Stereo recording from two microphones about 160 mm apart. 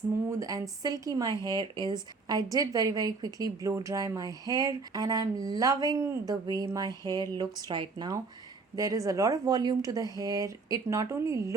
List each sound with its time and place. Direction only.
0.3 s speech: 20° right (ahead or behind)